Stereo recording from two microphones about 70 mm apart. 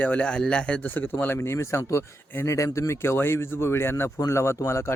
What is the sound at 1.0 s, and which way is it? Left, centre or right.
Speech, left.